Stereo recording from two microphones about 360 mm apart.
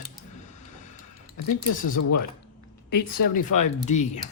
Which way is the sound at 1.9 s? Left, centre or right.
Left.